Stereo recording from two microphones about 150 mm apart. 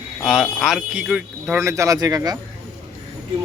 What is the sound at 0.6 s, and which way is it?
A man's voice, centre (ahead or behind).